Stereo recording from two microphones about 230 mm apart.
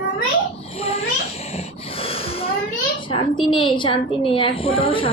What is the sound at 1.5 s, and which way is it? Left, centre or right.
Snort, left.